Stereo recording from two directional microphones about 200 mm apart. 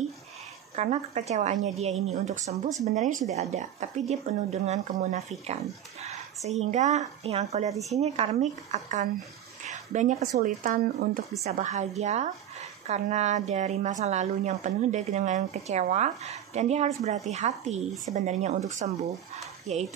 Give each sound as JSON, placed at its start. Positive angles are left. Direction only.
{"t": 0.7, "sound": "a woman's voice", "side_deg": -35}